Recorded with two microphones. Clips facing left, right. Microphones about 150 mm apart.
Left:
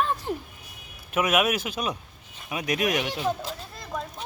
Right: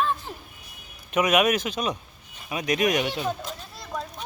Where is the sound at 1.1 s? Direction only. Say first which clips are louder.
Right 2 dB; 5° left (ahead or behind).